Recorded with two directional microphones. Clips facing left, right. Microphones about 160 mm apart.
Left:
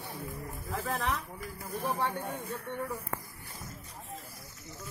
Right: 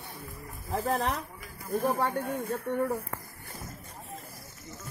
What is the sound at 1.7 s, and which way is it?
Speech, 45° right (ahead or behind).